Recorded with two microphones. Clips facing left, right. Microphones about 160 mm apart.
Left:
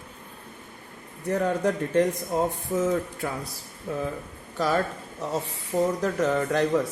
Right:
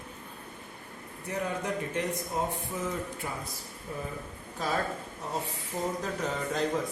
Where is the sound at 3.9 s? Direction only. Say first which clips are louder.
Left 8 dB; 80° left.